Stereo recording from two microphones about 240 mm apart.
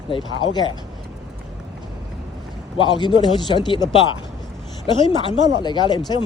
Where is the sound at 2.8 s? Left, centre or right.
Centre.